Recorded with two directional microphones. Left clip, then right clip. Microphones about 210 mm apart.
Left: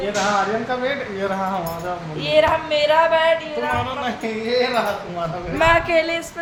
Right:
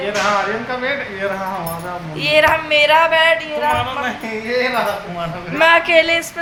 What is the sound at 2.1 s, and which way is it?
A woman's voice, centre (ahead or behind).